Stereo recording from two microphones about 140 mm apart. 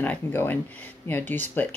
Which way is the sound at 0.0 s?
15° left (ahead or behind).